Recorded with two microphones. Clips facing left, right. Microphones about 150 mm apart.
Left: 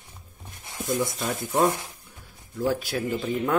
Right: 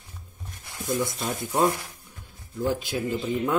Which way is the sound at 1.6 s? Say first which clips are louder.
Even; 20° left (ahead or behind).